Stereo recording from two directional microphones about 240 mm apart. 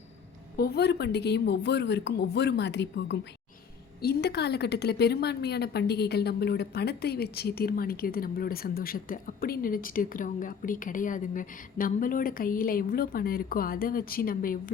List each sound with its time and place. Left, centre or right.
0.5 s a woman's voice: left